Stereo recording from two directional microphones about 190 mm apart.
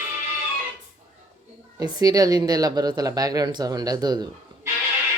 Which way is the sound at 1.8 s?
20° right (ahead or behind).